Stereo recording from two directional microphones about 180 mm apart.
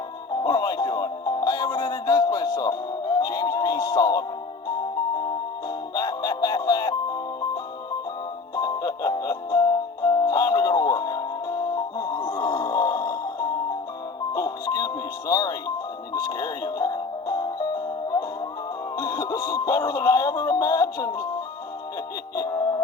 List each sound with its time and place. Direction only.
0.4 s music: 20° left (ahead or behind)
5.9 s music: 20° left (ahead or behind)
18.9 s music: 20° left (ahead or behind)
22.4 s music: 20° left (ahead or behind)